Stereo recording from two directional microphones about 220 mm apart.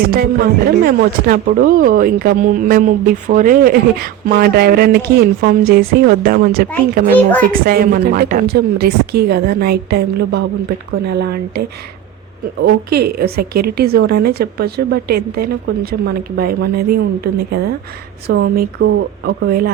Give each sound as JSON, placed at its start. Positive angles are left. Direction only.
{"t": 0.1, "sound": "a child's voice", "side_deg": -45}
{"t": 12.6, "sound": "speech", "side_deg": -45}